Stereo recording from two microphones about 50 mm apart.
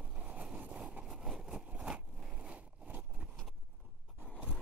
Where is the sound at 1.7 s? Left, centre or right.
Right.